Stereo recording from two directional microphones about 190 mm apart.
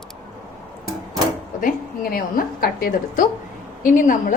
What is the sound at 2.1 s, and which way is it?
A woman's voice, 50° left (ahead or behind).